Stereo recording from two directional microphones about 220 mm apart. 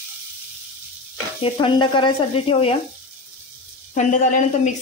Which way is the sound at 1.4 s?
25° left (ahead or behind).